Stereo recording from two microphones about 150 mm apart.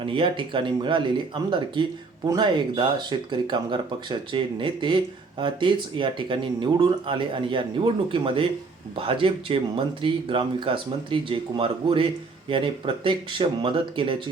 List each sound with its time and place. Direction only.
0.0 s speech: 35° right (ahead or behind)